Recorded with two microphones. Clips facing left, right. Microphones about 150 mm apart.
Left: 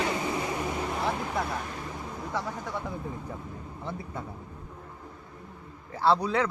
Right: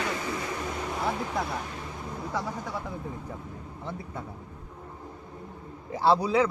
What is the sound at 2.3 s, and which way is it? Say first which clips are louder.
Speech: even; 10° right (ahead or behind).